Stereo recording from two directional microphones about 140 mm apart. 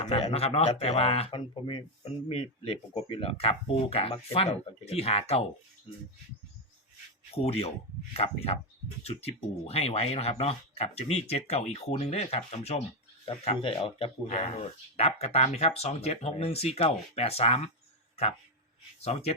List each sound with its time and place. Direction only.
0.3 s speech: 45° left (ahead or behind)
7.3 s speech: 45° left (ahead or behind)